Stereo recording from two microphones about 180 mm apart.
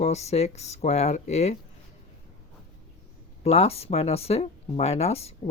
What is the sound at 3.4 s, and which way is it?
Speech, 35° left (ahead or behind).